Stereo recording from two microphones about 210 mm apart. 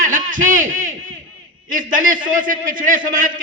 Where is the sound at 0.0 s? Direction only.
40° right (ahead or behind).